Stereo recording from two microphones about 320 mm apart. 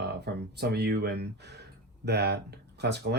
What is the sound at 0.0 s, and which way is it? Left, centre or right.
Speech, right.